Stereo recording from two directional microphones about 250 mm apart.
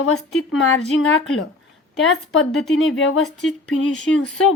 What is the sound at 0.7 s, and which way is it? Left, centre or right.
Speech, left.